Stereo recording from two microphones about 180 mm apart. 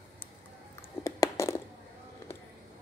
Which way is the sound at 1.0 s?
15° left (ahead or behind).